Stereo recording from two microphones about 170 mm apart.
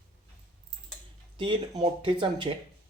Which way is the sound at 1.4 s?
25° right (ahead or behind).